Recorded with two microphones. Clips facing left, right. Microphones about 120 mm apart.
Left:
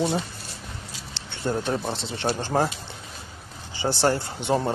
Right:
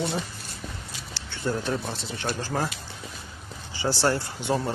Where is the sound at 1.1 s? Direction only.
25° left (ahead or behind).